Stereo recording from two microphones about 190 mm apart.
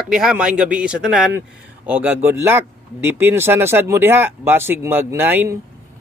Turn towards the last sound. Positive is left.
turn(degrees=-10)  # may be behind; listen again after turning